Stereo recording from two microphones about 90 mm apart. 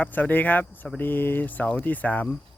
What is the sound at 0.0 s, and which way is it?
Speech, 20° left (ahead or behind).